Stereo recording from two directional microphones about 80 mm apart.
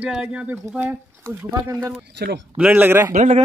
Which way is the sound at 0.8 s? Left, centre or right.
Right.